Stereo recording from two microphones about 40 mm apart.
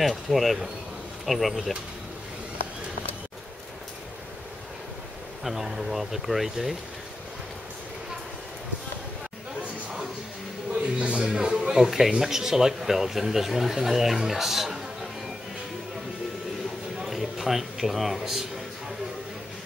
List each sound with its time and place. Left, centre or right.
0.3 s speech: centre
1.5 s speech: centre
5.4 s speech: centre
10.7 s a sound: right
11.2 s a sound: centre
12.2 s speech: centre
17.0 s a man's voice: centre